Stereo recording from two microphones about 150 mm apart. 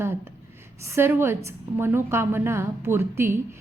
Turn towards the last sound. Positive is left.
turn(degrees=-15)  # may be behind; listen again after turning